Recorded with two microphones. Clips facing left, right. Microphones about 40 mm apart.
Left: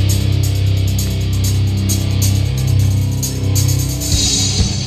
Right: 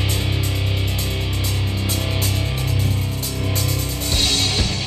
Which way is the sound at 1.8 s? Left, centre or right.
Centre.